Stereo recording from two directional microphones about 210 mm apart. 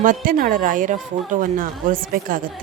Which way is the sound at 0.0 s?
40° right (ahead or behind).